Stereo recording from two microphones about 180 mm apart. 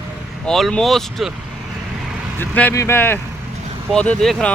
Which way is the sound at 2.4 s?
10° left (ahead or behind).